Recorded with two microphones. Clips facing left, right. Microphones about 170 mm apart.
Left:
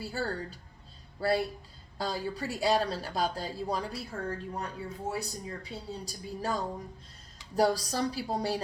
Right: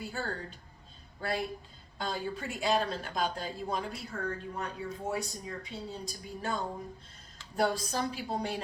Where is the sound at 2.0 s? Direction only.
35° left (ahead or behind).